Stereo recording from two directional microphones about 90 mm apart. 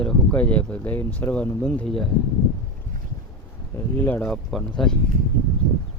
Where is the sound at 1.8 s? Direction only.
Centre (ahead or behind).